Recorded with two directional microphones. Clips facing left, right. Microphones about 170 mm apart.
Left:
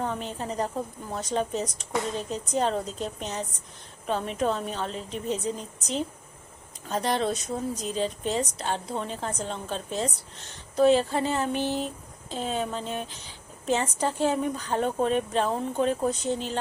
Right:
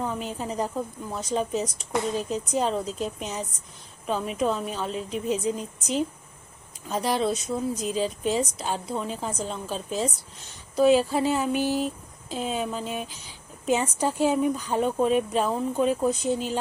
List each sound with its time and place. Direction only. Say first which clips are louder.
0.0 s speech: right 1 dB; 5° right (ahead or behind)